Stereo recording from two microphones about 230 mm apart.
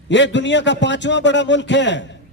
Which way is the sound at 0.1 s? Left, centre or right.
Left.